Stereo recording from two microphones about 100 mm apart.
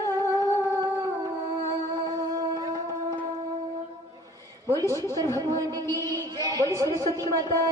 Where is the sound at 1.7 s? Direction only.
40° right (ahead or behind).